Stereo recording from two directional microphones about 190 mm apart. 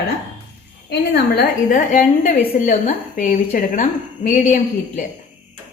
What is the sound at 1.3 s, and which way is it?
A woman's voice, 45° left (ahead or behind).